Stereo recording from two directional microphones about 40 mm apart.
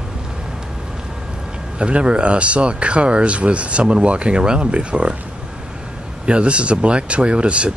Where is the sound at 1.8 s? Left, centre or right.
Right.